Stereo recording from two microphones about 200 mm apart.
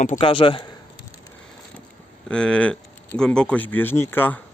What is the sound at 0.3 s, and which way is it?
Speech, 25° left (ahead or behind).